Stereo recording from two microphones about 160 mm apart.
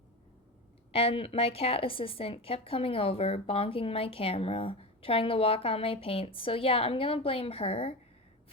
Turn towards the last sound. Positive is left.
turn(degrees=35)  # may be behind; listen again after turning